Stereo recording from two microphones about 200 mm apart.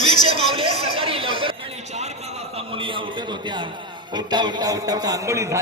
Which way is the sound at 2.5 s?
25° right (ahead or behind).